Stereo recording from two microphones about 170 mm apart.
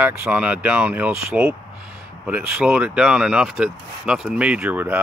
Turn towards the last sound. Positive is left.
turn(degrees=-10)  # may be behind; listen again after turning